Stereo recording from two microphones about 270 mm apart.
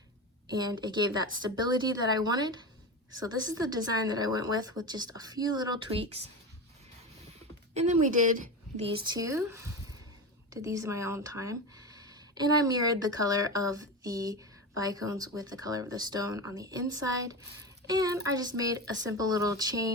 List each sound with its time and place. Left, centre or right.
0.5 s a woman's voice: centre
7.7 s a woman's voice: right